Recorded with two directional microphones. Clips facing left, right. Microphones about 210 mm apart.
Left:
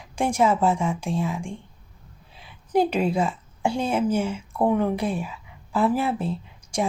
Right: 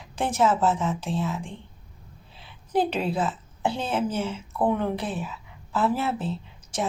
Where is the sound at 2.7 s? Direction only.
10° left (ahead or behind).